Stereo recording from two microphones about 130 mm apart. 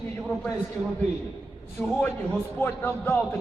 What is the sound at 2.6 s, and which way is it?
Speech, 15° left (ahead or behind).